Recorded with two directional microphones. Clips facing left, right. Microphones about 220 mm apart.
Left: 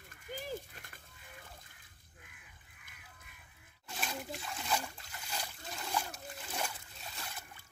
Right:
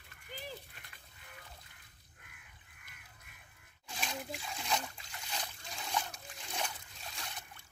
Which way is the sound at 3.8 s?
Centre (ahead or behind).